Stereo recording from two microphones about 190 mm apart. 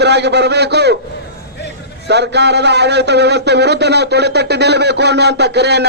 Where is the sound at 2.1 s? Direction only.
60° right (ahead or behind).